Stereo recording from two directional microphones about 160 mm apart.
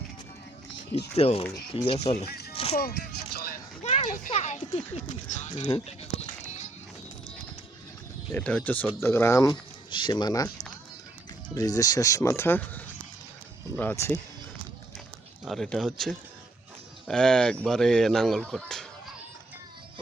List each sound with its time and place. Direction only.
1.1 s speech: 40° left (ahead or behind)
1.5 s speech: 30° left (ahead or behind)
2.2 s music: 80° left
2.7 s speech: 75° left (ahead or behind)
3.3 s a sound: 70° left (ahead or behind)
3.8 s speech: 45° left (ahead or behind)
4.3 s speech: 40° left (ahead or behind)
5.6 s a sound: 35° left (ahead or behind)
8.3 s speech: 10° left (ahead or behind)
11.5 s speech: 20° left (ahead or behind)
15.4 s speech: 5° left (ahead or behind)